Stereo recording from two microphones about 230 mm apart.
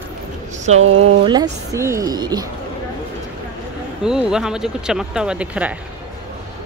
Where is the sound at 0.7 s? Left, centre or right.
Right.